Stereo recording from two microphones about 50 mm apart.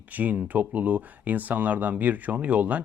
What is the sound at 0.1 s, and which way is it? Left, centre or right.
Speech, right.